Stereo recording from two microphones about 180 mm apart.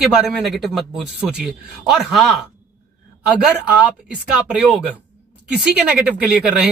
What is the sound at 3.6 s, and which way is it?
Speech, 5° right (ahead or behind).